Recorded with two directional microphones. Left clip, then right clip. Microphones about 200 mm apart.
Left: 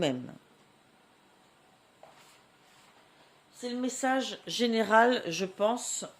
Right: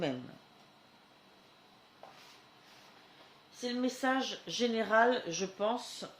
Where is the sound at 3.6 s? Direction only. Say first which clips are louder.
Left 2 dB; 35° left (ahead or behind); by 6.0 s 50° left (ahead or behind).